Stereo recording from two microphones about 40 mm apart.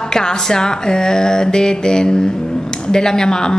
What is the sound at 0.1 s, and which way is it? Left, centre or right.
Speech, centre.